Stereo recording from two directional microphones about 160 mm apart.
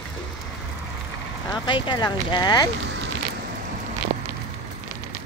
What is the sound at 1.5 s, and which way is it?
Speech, 30° left (ahead or behind).